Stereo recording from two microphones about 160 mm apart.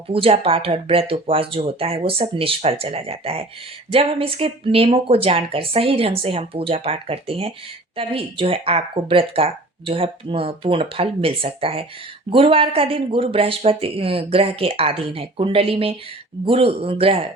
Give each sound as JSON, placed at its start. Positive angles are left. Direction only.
{"t": 0.1, "sound": "speech", "side_deg": -35}